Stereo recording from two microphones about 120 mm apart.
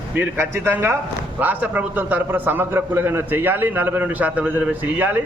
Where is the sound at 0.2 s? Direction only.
20° right (ahead or behind).